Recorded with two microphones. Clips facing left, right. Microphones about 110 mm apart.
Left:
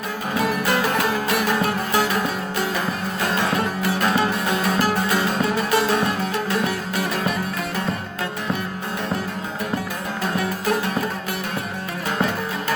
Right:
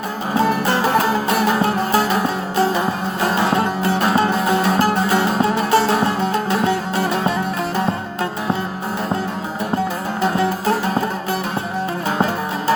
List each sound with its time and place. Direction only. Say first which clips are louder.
0.3 s music: right 4 dB; 30° right (ahead or behind)
10.3 s music: right 2 dB; 30° right (ahead or behind)